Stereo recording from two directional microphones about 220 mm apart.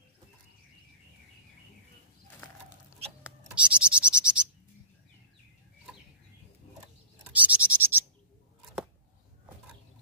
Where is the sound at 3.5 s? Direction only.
5° right (ahead or behind).